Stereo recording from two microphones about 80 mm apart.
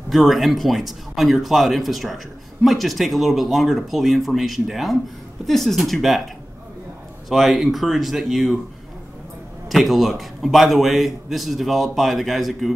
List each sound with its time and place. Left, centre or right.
0.1 s speech: centre
7.2 s speech: centre
9.7 s speech: centre